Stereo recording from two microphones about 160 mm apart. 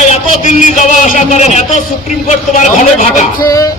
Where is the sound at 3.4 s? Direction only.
20° left (ahead or behind).